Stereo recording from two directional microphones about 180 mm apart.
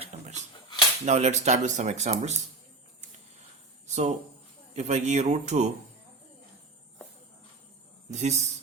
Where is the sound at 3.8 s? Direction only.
40° right (ahead or behind).